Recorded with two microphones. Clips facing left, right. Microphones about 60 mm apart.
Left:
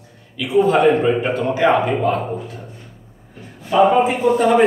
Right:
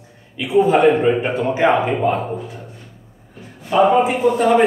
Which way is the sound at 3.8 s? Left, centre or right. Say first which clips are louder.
Even; centre.